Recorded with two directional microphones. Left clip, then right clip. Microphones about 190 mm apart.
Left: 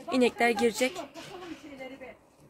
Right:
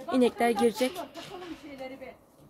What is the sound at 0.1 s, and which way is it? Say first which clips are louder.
Speech: even; 5° right (ahead or behind).